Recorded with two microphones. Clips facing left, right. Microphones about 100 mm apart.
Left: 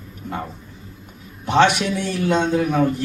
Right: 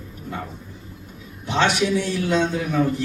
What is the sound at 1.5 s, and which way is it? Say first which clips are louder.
Speech: left 4 dB; 55° left (ahead or behind).